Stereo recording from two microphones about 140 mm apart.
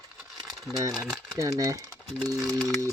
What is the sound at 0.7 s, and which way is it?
Speech, 25° right (ahead or behind).